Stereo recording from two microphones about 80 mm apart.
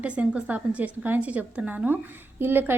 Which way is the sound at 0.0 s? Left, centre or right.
Centre.